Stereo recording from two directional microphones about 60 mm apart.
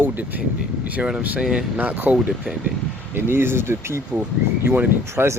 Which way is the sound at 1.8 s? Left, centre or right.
Right.